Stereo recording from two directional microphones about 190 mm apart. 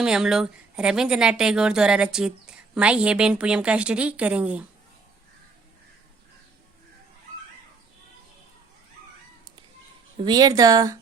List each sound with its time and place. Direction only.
0.0 s speech: 5° right (ahead or behind)
10.2 s speech: 20° right (ahead or behind)